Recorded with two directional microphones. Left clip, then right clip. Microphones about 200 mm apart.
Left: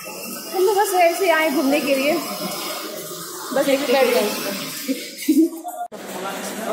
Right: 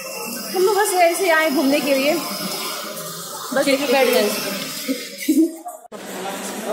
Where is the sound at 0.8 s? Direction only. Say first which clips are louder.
Left 1 dB; 5° right (ahead or behind).